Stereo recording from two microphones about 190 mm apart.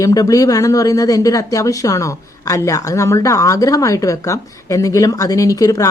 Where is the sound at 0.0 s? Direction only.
20° left (ahead or behind).